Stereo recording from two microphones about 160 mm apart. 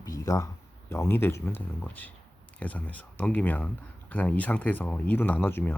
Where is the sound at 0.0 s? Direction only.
20° left (ahead or behind).